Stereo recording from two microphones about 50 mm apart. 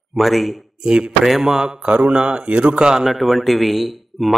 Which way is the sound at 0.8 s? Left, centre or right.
Centre.